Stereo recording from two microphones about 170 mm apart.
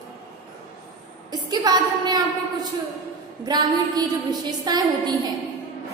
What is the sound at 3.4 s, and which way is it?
A woman's voice, 25° right (ahead or behind).